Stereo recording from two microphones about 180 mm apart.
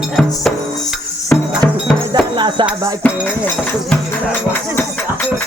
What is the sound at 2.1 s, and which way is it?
Music, 25° right (ahead or behind).